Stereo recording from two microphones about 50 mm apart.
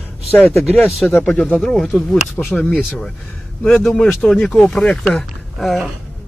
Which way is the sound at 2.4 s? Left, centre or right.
Left.